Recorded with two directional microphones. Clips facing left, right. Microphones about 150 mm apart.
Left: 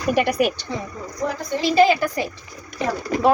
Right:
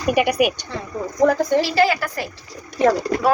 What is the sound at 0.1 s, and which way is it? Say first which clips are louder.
Speech: right 2 dB; 10° right (ahead or behind).